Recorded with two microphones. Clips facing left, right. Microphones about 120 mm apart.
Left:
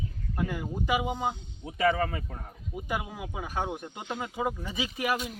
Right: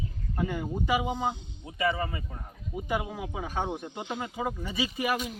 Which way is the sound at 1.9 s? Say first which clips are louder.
Left 3 dB; 65° left (ahead or behind).